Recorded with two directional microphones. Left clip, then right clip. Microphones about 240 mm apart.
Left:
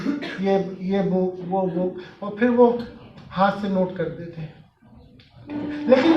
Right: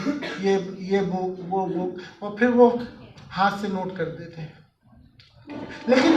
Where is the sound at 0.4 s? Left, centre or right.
Right.